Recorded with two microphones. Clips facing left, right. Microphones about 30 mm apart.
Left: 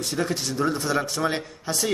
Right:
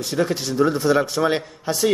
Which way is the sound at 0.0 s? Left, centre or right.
Centre.